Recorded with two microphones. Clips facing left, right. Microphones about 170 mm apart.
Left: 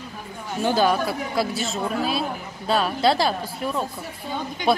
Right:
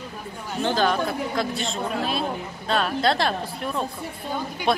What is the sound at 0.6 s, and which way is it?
A woman's voice, 10° left (ahead or behind).